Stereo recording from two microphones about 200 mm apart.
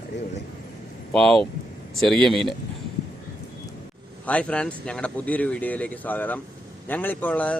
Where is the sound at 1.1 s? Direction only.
Centre (ahead or behind).